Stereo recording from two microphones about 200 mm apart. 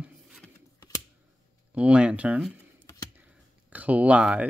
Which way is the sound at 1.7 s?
5° right (ahead or behind).